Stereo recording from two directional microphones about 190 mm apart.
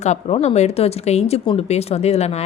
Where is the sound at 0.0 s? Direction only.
35° left (ahead or behind).